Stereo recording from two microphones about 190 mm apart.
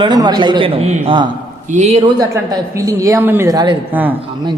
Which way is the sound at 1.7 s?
35° right (ahead or behind).